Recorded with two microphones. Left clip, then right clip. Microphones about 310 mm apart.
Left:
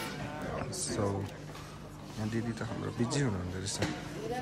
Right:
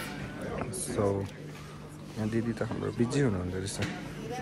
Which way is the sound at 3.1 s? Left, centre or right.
Centre.